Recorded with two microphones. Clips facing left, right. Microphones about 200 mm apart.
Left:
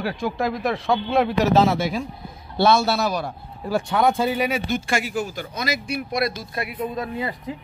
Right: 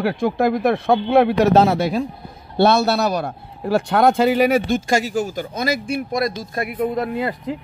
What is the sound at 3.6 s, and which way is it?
Speech, 70° right (ahead or behind).